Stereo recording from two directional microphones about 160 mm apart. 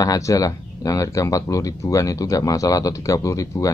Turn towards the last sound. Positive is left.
turn(degrees=20)  # may be behind; listen again after turning